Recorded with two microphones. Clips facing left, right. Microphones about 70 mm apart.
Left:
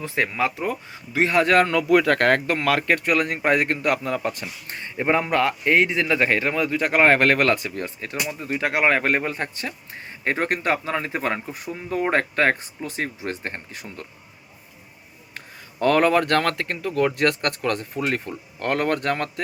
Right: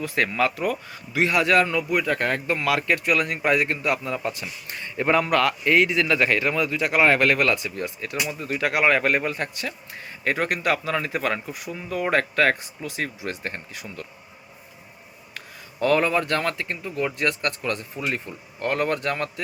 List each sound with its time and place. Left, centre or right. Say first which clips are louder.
0.0 s speech: right 1 dB; left
1.7 s speech: left 5 dB; left
2.6 s speech: left 2 dB; left
4.8 s speech: even; left
15.4 s speech: even; left